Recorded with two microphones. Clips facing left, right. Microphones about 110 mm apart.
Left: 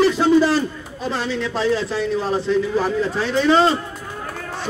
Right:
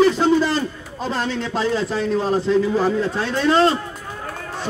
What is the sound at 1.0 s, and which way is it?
A man's voice, 40° right (ahead or behind).